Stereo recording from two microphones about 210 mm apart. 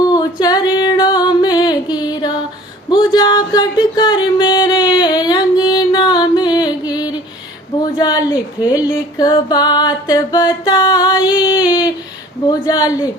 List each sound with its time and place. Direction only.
0.1 s singing: 20° left (ahead or behind)
3.2 s music: 20° left (ahead or behind)
7.9 s a sound: 20° left (ahead or behind)
9.1 s music: 20° left (ahead or behind)
12.5 s speech: 20° left (ahead or behind)